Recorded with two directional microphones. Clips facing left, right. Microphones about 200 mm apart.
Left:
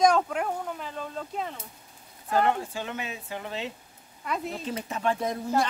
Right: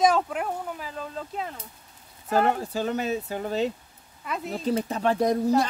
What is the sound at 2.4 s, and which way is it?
Speech, 40° right (ahead or behind).